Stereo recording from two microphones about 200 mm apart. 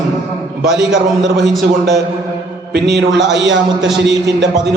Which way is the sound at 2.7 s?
60° right (ahead or behind).